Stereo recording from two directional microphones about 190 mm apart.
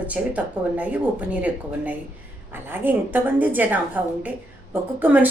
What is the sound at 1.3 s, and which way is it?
Speech, 5° right (ahead or behind).